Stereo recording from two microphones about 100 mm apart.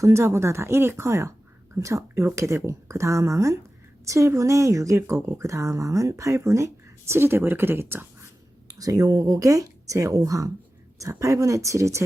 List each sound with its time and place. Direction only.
0.0 s speech: 30° right (ahead or behind)
8.6 s speech: 35° right (ahead or behind)